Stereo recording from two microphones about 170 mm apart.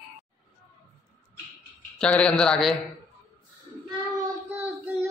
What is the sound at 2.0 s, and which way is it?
Speech, 5° left (ahead or behind).